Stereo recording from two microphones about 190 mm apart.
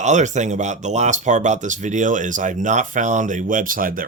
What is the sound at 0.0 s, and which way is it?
Speech, 40° right (ahead or behind).